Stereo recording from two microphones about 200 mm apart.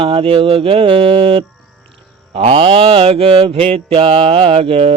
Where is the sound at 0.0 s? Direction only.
25° right (ahead or behind).